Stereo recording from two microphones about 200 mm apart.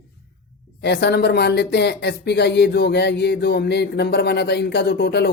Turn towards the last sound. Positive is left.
turn(degrees=55)  # may be behind; listen again after turning